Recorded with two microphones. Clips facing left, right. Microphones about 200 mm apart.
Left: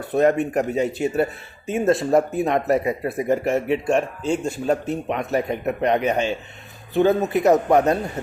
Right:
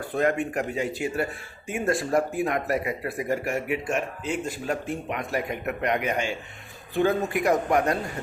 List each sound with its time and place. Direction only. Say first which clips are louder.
0.0 s speech: left 6 dB; 20° left (ahead or behind)